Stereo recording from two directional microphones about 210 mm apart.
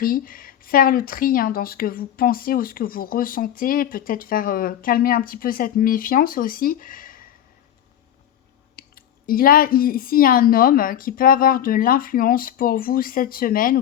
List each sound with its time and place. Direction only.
0.0 s speech: 45° left (ahead or behind)
8.7 s speech: 45° left (ahead or behind)